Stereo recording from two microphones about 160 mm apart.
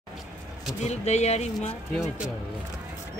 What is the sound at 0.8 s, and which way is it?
Speech, 45° left (ahead or behind).